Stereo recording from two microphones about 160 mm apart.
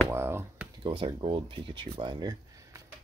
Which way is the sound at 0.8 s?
30° right (ahead or behind).